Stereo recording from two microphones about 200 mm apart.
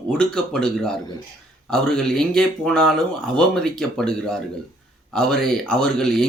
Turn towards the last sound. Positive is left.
turn(degrees=5)  # may be behind; listen again after turning